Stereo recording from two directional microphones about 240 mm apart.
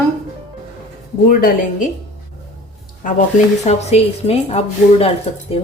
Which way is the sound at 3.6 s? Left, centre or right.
Left.